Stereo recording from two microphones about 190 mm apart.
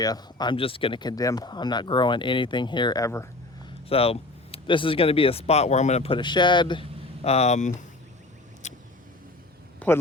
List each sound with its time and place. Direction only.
0.0 s speech: 20° left (ahead or behind)
3.8 s speech: 30° left (ahead or behind)
8.6 s vehicle: 40° left (ahead or behind)
9.8 s speech: 5° left (ahead or behind)